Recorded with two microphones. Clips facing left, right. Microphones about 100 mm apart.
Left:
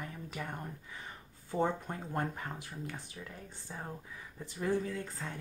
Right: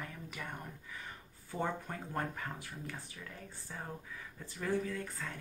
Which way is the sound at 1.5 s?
25° left (ahead or behind).